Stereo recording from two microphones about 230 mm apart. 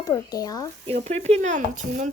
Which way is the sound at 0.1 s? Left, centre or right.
Centre.